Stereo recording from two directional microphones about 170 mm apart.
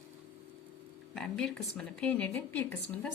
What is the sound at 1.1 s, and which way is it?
A woman's voice, 5° left (ahead or behind).